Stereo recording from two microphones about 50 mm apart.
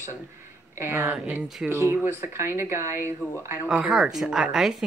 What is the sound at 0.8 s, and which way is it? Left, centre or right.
Speech, right.